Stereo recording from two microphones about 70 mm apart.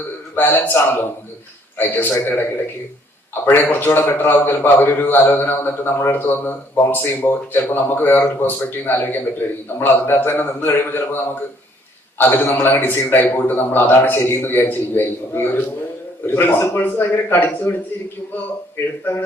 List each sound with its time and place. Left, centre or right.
0.3 s a man's voice: left
3.4 s a man's voice: left